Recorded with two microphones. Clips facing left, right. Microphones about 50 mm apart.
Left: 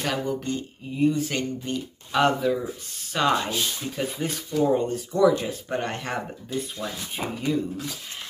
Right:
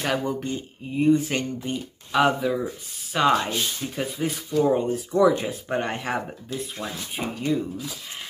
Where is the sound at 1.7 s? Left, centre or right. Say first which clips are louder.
Right 1 dB; centre.